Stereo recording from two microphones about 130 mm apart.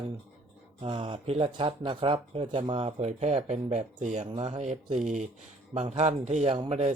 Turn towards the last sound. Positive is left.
turn(degrees=-55)  # may be behind; listen again after turning